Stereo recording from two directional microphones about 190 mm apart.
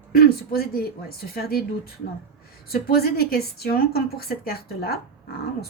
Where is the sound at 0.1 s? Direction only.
55° left (ahead or behind).